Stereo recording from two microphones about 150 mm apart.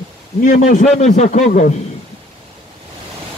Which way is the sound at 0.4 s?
55° left (ahead or behind).